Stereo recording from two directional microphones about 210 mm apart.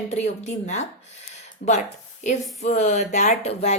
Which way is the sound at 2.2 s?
35° left (ahead or behind).